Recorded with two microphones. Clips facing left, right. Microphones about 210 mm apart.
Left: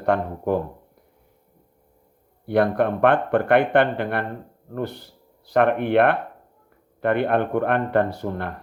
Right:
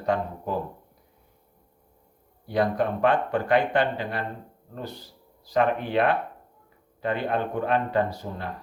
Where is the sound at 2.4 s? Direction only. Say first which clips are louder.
Left 5 dB; 60° left (ahead or behind).